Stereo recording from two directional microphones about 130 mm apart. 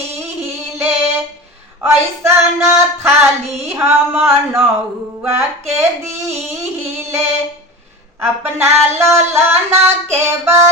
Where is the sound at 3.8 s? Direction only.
20° right (ahead or behind).